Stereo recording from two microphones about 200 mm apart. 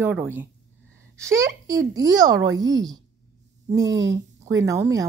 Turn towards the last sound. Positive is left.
turn(degrees=-15)  # may be behind; listen again after turning